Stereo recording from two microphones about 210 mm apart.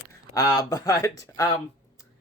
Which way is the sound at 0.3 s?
15° left (ahead or behind).